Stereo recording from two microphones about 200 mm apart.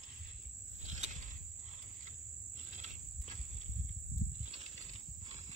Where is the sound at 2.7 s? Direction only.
35° right (ahead or behind).